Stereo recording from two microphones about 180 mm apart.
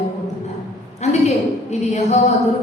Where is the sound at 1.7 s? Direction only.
40° left (ahead or behind).